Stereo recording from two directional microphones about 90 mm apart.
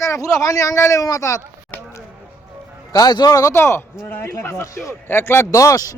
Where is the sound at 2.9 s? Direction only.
50° left (ahead or behind).